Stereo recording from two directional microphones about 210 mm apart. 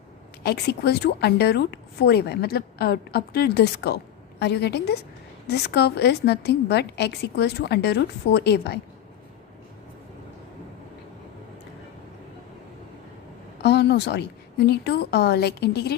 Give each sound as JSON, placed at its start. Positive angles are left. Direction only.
{"t": 0.4, "sound": "speech", "side_deg": 50}
{"t": 13.6, "sound": "a woman's voice", "side_deg": 50}